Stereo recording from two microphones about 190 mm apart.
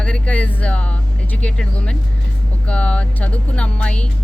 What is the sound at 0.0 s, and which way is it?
Speech, 5° left (ahead or behind).